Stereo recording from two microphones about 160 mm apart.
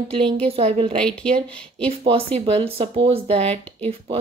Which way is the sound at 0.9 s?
5° left (ahead or behind).